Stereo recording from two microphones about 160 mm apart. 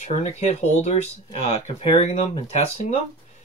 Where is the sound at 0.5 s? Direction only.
45° left (ahead or behind).